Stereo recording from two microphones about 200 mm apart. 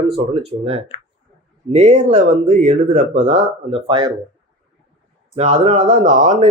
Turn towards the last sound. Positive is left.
turn(degrees=-40)  # may be behind; listen again after turning